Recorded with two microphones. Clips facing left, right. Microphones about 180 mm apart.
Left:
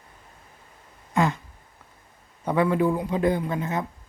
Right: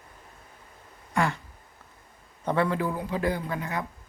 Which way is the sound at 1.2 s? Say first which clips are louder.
Left 3 dB; 20° left (ahead or behind).